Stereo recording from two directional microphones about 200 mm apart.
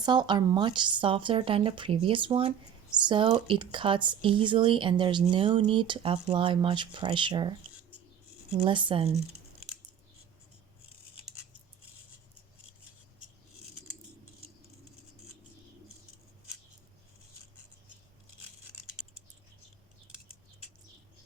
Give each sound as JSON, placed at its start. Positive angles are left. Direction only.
{"t": 0.0, "sound": "a woman's voice", "side_deg": -20}
{"t": 8.6, "sound": "a woman's voice", "side_deg": -25}